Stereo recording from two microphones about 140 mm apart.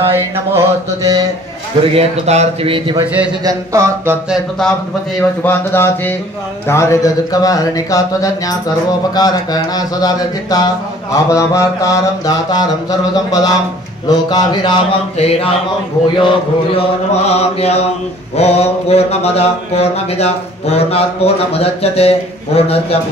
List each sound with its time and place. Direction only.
0.1 s mantra: 25° right (ahead or behind)
2.0 s speech: 50° right (ahead or behind)
3.4 s mantra: 20° right (ahead or behind)
5.4 s speech: 15° left (ahead or behind); by 16.8 s 40° left (ahead or behind)
17.3 s mantra: 50° left (ahead or behind)